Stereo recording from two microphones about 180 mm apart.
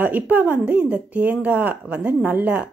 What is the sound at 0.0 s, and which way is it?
Speech, 10° right (ahead or behind).